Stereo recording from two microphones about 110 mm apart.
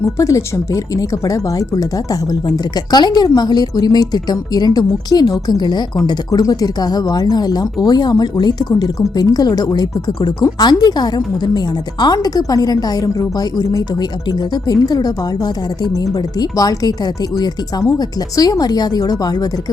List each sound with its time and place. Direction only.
0.0 s a woman's voice: 30° left (ahead or behind)